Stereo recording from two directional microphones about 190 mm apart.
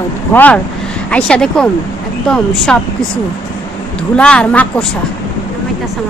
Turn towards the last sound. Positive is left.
turn(degrees=5)  # may be behind; listen again after turning